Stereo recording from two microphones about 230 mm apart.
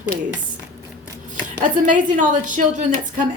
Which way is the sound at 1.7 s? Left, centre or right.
Right.